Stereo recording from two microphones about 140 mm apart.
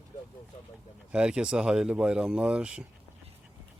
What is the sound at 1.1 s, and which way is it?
Speech, 5° right (ahead or behind).